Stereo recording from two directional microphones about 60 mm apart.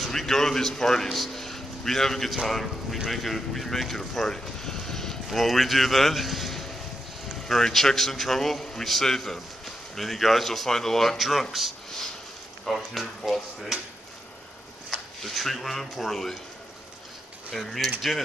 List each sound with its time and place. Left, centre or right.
0.0 s a man's voice: centre
11.5 s a sound: centre
12.6 s a man's voice: centre
15.2 s a man's voice: centre
17.6 s a man's voice: centre